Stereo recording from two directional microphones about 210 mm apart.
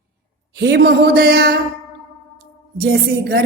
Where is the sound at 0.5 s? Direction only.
50° right (ahead or behind).